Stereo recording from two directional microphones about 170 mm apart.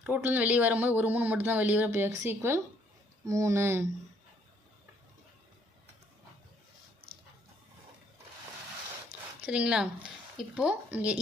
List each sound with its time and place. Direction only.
0.0 s speech: 10° right (ahead or behind)
9.5 s speech: 5° right (ahead or behind)